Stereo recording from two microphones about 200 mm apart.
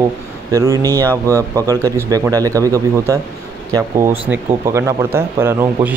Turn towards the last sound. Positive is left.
turn(degrees=-10)  # may be behind; listen again after turning